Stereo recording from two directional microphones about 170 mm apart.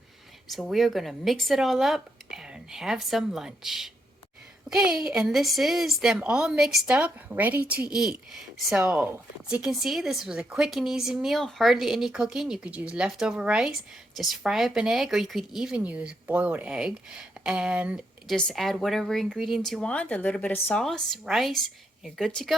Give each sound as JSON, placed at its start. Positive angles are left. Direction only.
{"t": 0.5, "sound": "speech", "side_deg": 0}